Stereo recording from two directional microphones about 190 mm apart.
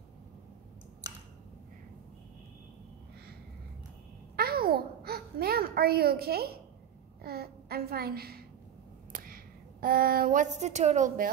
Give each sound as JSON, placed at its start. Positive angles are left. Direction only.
{"t": 4.4, "sound": "babbling", "side_deg": -55}
{"t": 7.2, "sound": "a woman's voice", "side_deg": -55}
{"t": 9.1, "sound": "a sound", "side_deg": -50}